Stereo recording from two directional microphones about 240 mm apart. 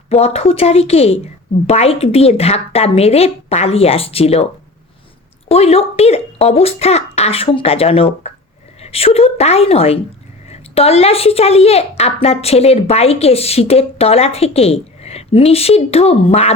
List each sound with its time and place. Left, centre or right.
0.1 s a woman's voice: left
5.5 s a woman's voice: left